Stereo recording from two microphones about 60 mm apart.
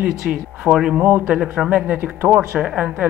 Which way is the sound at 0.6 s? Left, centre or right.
Centre.